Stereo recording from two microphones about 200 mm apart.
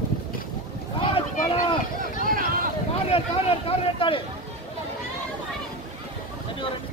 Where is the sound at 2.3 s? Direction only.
45° right (ahead or behind).